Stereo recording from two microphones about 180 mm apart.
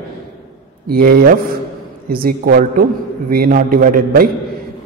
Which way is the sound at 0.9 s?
55° right (ahead or behind).